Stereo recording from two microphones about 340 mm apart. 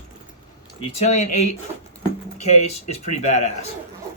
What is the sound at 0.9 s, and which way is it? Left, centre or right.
Speech, centre.